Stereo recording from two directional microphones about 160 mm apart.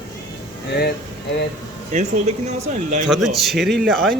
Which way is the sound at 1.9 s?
45° right (ahead or behind).